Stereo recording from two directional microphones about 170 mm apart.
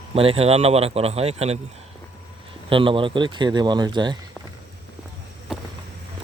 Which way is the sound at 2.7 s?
30° right (ahead or behind).